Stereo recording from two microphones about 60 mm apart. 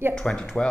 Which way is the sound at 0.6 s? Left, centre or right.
Centre.